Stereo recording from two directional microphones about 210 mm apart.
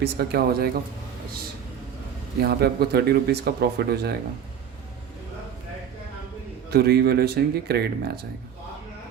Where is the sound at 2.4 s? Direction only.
50° right (ahead or behind).